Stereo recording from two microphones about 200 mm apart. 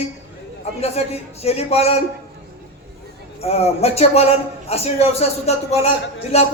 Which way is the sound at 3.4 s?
30° left (ahead or behind).